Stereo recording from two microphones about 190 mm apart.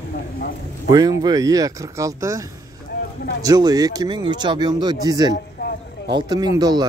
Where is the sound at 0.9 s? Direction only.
20° right (ahead or behind).